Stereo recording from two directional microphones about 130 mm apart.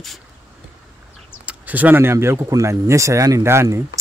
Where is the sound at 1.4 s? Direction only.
10° right (ahead or behind).